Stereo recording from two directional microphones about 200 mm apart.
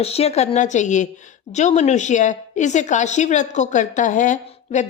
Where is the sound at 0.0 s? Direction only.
30° left (ahead or behind).